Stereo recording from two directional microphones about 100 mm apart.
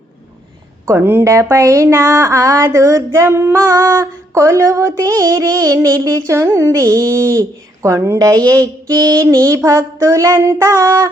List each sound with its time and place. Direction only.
0.9 s speech: 25° right (ahead or behind)